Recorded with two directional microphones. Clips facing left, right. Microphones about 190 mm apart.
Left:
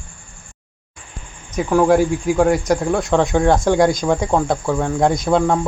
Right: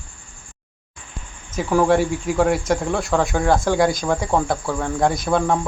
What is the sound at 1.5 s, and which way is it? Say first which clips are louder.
Speech: left 3 dB; centre (ahead or behind).